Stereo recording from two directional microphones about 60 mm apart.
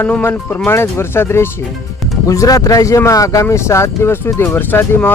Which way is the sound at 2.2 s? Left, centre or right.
Left.